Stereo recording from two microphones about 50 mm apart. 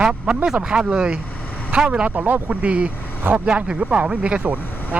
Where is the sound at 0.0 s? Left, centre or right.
Centre.